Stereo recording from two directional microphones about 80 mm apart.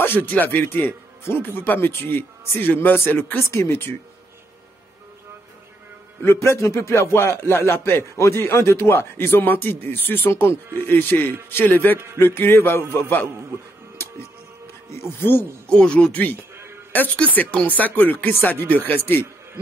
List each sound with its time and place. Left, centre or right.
0.0 s speech: left
3.4 s speech: left
6.2 s speech: left
15.0 s speech: left
15.7 s speech: centre